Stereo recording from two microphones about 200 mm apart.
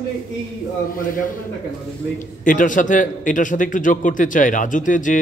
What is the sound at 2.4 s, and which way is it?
A man's voice, 40° left (ahead or behind).